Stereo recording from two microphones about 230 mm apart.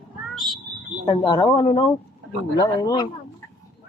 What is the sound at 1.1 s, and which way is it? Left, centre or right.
Speech, centre.